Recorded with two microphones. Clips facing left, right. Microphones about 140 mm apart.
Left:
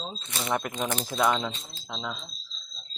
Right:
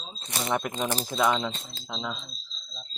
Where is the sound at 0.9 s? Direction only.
30° right (ahead or behind).